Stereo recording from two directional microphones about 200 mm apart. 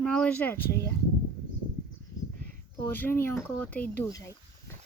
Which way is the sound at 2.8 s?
10° left (ahead or behind).